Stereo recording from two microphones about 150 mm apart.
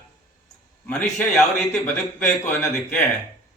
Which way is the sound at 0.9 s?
5° left (ahead or behind).